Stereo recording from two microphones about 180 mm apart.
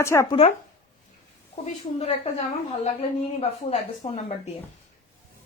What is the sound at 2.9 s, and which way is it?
A woman's voice, 30° left (ahead or behind).